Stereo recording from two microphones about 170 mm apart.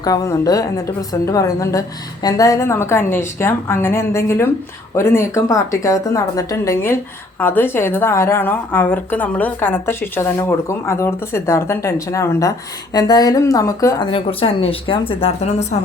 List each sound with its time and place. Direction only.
0.0 s a woman's voice: 20° left (ahead or behind)
14.1 s speech: 35° left (ahead or behind)